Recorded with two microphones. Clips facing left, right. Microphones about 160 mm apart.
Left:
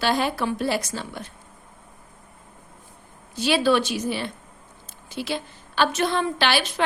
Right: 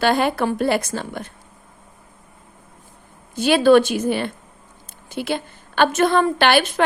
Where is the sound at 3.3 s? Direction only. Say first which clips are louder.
Right 7 dB; 55° right (ahead or behind).